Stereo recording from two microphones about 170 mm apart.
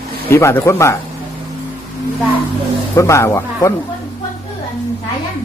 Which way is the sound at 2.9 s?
20° left (ahead or behind).